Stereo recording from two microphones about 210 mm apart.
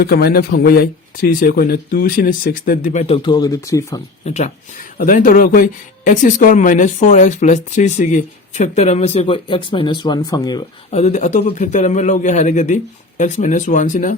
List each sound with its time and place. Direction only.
0.0 s speech: 45° left (ahead or behind); by 4.0 s 15° left (ahead or behind)
4.3 s speech: 35° left (ahead or behind); by 10.7 s 20° left (ahead or behind)
10.9 s speech: 35° left (ahead or behind)